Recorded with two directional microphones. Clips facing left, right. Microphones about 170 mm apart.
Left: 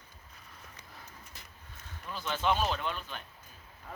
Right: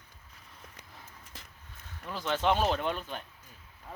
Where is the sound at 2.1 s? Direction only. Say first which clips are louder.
Right 3 dB; 75° right (ahead or behind); by 3.2 s 50° right (ahead or behind).